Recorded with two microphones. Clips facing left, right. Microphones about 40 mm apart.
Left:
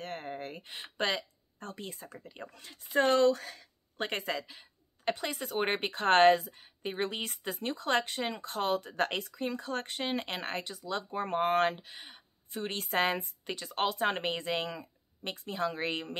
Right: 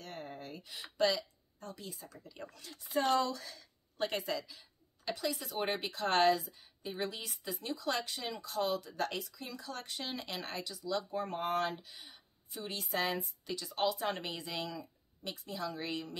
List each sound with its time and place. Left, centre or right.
0.0 s a sound: left
0.8 s speech: left
2.4 s speech: left
2.9 s a woman's voice: left
3.5 s a woman's voice: left